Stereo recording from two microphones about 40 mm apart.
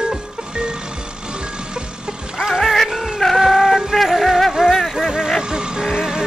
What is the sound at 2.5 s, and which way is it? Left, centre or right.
Music, centre.